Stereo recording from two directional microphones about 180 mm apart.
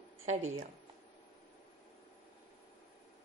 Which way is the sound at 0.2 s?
40° right (ahead or behind).